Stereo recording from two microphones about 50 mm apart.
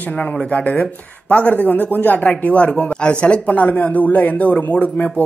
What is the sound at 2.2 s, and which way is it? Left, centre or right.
Speech, left.